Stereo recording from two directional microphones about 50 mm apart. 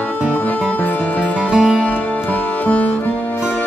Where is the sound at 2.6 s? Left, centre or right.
Left.